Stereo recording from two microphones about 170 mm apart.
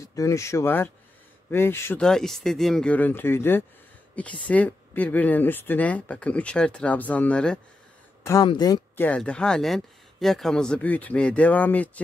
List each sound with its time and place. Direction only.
0.0 s speech: 20° left (ahead or behind)
8.3 s speech: 25° left (ahead or behind)
8.9 s speech: 10° left (ahead or behind)